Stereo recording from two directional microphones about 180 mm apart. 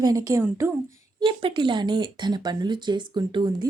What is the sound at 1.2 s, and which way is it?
Speech, 30° right (ahead or behind).